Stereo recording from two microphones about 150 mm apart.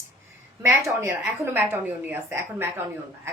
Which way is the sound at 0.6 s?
15° right (ahead or behind).